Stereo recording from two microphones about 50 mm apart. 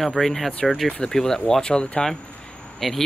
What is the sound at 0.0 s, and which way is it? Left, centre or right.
Speech, centre.